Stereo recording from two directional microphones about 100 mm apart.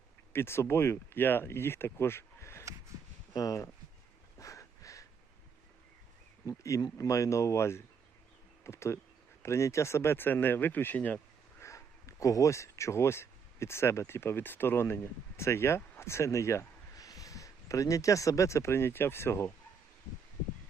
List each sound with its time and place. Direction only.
0.3 s speech: 25° left (ahead or behind)
4.4 s a sound: 30° left (ahead or behind)
6.4 s speech: 30° left (ahead or behind); by 11.2 s 15° left (ahead or behind)
11.6 s speech: 30° left (ahead or behind)